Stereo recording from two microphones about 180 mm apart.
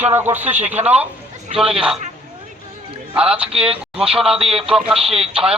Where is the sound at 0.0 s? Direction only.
10° right (ahead or behind).